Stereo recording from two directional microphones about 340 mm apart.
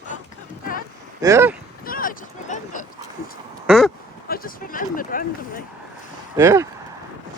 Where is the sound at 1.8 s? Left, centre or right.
Left.